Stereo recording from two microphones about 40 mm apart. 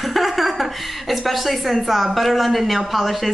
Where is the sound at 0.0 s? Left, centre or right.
Centre.